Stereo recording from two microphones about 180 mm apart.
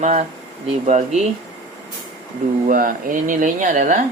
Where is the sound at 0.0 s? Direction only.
40° right (ahead or behind).